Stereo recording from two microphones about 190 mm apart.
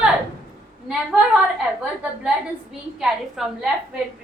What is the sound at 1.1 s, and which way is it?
Speech, 5° right (ahead or behind).